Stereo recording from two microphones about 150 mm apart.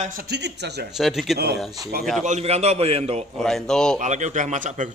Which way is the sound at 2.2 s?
50° right (ahead or behind).